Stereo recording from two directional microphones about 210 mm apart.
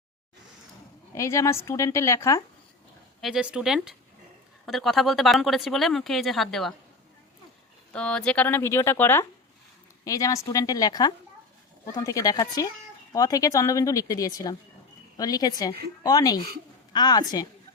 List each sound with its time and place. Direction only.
1.1 s speech: 15° left (ahead or behind)
3.2 s speech: centre (ahead or behind)
7.9 s a woman's voice: 5° left (ahead or behind)